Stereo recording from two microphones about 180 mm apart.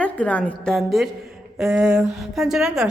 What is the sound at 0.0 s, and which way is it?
A woman's voice, 10° left (ahead or behind).